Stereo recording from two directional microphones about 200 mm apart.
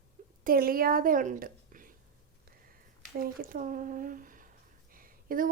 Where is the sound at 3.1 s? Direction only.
45° right (ahead or behind).